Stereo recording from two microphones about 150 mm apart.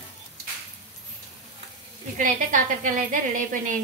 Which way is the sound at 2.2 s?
65° right (ahead or behind).